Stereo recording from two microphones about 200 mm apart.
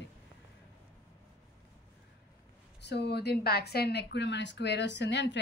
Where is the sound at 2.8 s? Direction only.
55° left (ahead or behind).